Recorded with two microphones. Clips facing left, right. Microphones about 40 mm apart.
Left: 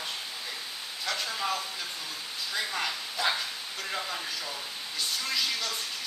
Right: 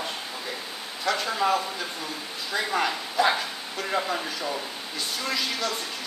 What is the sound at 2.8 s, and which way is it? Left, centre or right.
Speech, centre.